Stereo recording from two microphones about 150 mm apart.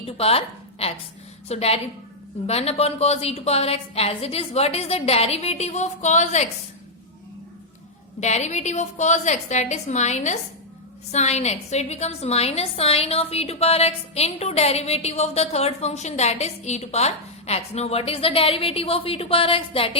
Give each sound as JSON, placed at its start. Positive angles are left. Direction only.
{"t": 0.0, "sound": "a woman's voice", "side_deg": 40}
{"t": 8.2, "sound": "a woman's voice", "side_deg": 50}